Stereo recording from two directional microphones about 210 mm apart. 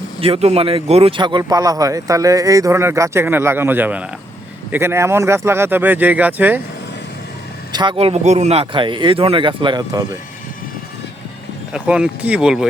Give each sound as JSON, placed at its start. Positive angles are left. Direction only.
{"t": 0.2, "sound": "speech", "side_deg": -30}
{"t": 7.7, "sound": "speech", "side_deg": -20}
{"t": 11.7, "sound": "speech", "side_deg": -5}